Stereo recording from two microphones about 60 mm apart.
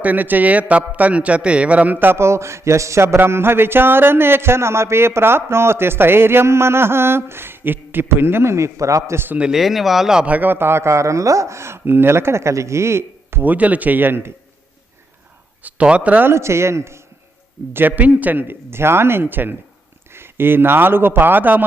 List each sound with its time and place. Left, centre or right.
0.0 s a man's voice: right
9.1 s a man's voice: right
9.6 s speech: centre
10.2 s speech: right
13.4 s a man's voice: right
15.6 s speech: right
16.2 s speech: right
17.7 s a man's voice: right